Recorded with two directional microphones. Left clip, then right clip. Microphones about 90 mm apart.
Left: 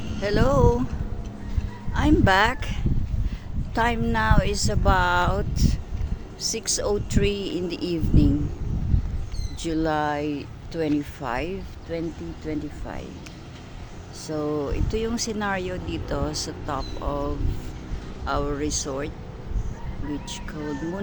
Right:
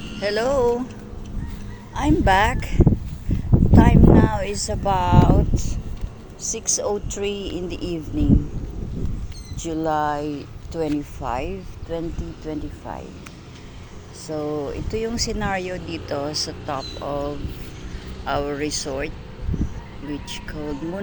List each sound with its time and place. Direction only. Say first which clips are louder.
0.2 s speech: right 2 dB; 15° left (ahead or behind)
1.9 s speech: right 2 dB; 5° left (ahead or behind)
9.6 s speech: right 2 dB; 20° left (ahead or behind)
10.2 s speech: even; centre (ahead or behind)
11.2 s speech: right 2 dB; 10° left (ahead or behind)
14.3 s speech: right 1 dB; 10° left (ahead or behind)
18.3 s speech: right 3 dB; 10° right (ahead or behind)